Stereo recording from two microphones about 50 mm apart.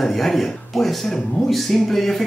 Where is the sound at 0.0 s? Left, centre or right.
Centre.